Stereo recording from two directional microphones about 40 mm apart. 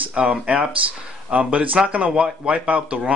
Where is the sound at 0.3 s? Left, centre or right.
Right.